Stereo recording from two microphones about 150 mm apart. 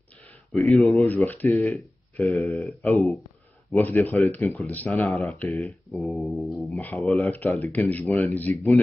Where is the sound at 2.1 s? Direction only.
15° left (ahead or behind).